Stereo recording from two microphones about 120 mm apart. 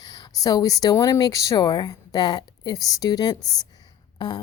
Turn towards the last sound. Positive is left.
turn(degrees=40)  # may be behind; listen again after turning